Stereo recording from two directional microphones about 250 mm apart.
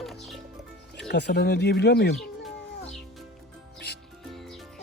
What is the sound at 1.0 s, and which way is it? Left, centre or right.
Speech, left.